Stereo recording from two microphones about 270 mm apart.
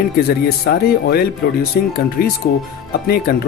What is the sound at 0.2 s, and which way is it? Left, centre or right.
Speech, left.